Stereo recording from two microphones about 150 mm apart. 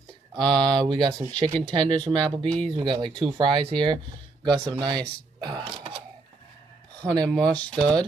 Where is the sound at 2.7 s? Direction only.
30° right (ahead or behind).